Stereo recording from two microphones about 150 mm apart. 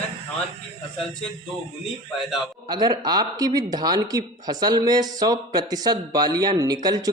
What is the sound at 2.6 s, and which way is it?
Speech, 25° right (ahead or behind).